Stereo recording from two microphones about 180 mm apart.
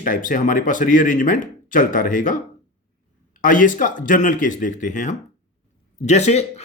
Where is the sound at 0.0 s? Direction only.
50° left (ahead or behind).